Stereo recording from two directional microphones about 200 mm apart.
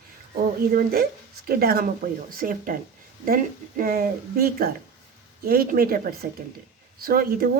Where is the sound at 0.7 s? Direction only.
50° right (ahead or behind).